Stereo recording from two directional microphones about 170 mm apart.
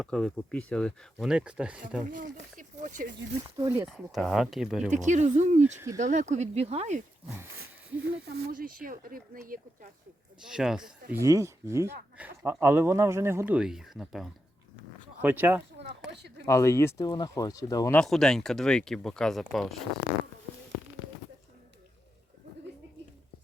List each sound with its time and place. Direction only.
0.0 s speech: 5° left (ahead or behind)
2.0 s speech: 55° right (ahead or behind)
3.6 s speech: 15° right (ahead or behind)
3.8 s speech: centre (ahead or behind)
4.9 s speech: 45° right (ahead or behind)
8.0 s speech: 70° right (ahead or behind)
10.4 s speech: 5° right (ahead or behind)
11.1 s speech: 15° right (ahead or behind)
15.8 s speech: 80° right
16.5 s speech: 15° left (ahead or behind)
17.9 s speech: centre (ahead or behind)